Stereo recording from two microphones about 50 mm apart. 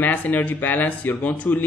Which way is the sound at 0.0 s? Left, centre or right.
Left.